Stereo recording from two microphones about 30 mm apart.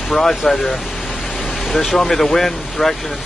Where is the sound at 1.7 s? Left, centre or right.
Centre.